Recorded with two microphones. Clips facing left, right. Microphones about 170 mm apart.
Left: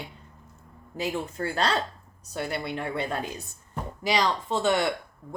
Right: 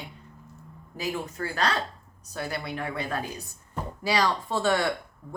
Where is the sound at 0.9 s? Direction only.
30° left (ahead or behind).